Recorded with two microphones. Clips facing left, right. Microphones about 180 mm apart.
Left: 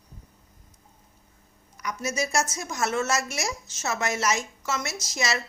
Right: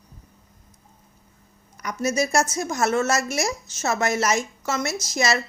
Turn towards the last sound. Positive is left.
turn(degrees=-45)  # may be behind; listen again after turning